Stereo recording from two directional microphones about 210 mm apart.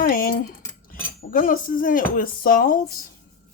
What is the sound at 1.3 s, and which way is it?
Speech, 40° left (ahead or behind).